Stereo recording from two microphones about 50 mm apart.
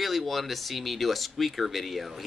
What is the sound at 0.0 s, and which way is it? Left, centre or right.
Speech, centre.